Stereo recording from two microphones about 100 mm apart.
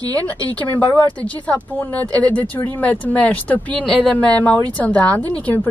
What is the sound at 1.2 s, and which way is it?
Speech, 15° left (ahead or behind).